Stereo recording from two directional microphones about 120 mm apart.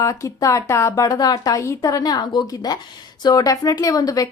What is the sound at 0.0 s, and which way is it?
A woman's voice, 25° left (ahead or behind).